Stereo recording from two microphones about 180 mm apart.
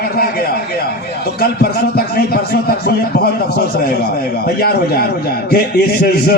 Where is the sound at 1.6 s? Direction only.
60° left (ahead or behind).